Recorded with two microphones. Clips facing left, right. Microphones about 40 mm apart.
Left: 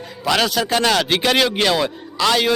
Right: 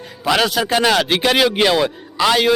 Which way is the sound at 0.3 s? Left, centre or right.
Centre.